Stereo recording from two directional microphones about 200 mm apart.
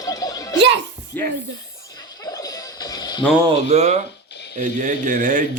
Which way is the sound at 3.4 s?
30° right (ahead or behind).